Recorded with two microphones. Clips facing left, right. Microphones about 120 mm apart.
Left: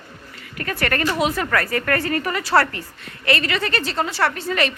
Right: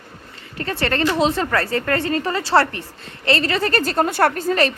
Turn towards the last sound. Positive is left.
turn(degrees=-40)  # may be behind; listen again after turning